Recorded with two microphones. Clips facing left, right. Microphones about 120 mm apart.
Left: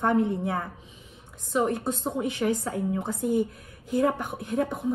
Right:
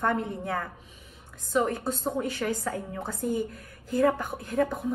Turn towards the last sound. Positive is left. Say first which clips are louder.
# even
turn(degrees=20)  # may be behind; listen again after turning